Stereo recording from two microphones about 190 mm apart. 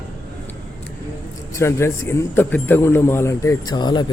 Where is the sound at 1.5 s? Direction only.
15° left (ahead or behind).